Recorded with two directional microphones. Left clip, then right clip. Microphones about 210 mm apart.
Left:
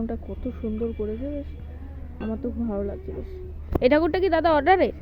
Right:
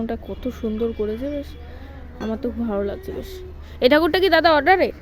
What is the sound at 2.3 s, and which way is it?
Speech, 25° right (ahead or behind).